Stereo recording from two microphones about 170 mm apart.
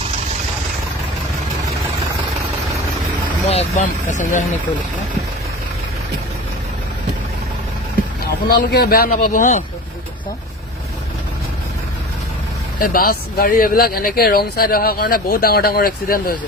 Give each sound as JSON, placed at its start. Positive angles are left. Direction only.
{"t": 3.5, "sound": "speech", "side_deg": 40}
{"t": 8.4, "sound": "speech", "side_deg": 65}
{"t": 12.8, "sound": "speech", "side_deg": 55}